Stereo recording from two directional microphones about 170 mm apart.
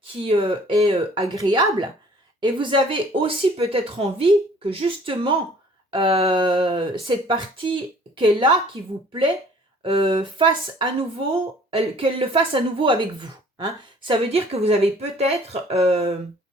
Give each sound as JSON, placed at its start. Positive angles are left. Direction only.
{"t": 0.1, "sound": "speech", "side_deg": -35}
{"t": 9.8, "sound": "speech", "side_deg": -30}